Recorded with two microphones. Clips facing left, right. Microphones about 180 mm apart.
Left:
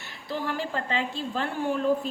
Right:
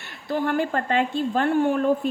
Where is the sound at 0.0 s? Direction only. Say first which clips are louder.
Right 7 dB; 55° right (ahead or behind).